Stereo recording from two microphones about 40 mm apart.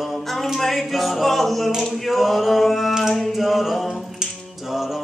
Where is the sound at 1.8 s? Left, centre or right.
Centre.